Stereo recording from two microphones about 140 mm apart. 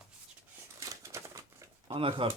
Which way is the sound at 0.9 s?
20° right (ahead or behind).